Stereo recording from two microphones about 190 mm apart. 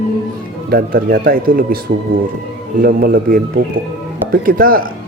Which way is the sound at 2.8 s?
50° right (ahead or behind).